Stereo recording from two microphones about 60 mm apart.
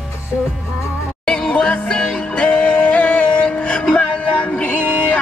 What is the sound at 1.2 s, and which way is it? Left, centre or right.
Music, centre.